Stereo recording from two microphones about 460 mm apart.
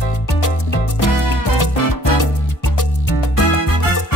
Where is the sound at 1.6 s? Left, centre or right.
Left.